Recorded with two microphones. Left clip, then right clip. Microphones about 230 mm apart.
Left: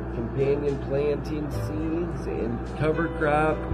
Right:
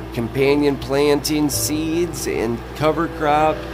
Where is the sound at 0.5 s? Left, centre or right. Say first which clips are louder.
Right 9 dB; right.